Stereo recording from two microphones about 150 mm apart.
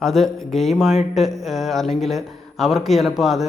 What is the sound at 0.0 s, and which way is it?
A man's voice, centre (ahead or behind).